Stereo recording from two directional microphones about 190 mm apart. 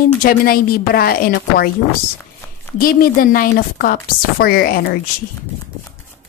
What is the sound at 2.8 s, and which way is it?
Speech, 50° left (ahead or behind).